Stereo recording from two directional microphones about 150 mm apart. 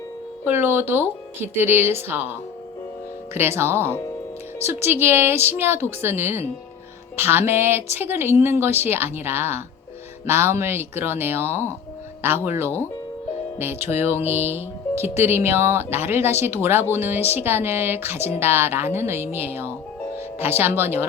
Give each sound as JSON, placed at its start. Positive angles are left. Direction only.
{"t": 0.4, "sound": "speech", "side_deg": -15}